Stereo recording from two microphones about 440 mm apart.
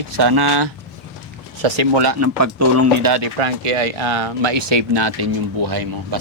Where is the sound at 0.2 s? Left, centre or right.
Right.